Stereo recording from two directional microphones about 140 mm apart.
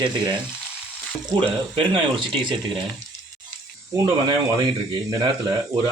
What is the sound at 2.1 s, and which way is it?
Speech, 35° right (ahead or behind).